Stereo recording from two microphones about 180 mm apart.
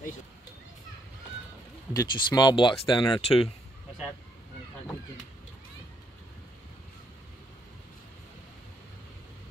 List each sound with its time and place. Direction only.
2.0 s speech: 25° left (ahead or behind)